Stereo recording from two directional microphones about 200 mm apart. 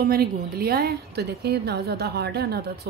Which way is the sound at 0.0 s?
50° right (ahead or behind).